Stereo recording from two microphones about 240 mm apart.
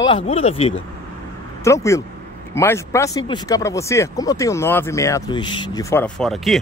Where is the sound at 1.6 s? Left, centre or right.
Centre.